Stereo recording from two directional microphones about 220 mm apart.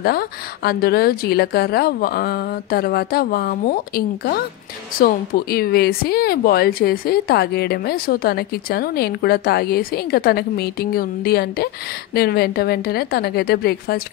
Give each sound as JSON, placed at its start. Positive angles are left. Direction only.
{"t": 0.7, "sound": "speech", "side_deg": 45}